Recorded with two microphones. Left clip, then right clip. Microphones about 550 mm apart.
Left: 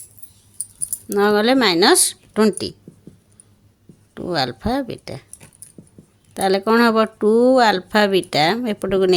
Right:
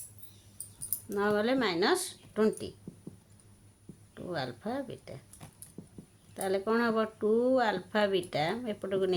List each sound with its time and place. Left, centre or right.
1.1 s speech: centre
4.1 s speech: centre
6.3 s speech: centre